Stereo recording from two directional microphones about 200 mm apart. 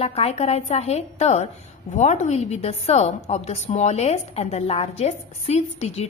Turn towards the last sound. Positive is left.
turn(degrees=35)  # may be behind; listen again after turning